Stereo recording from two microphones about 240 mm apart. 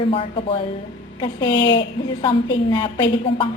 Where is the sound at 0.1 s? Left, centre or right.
Left.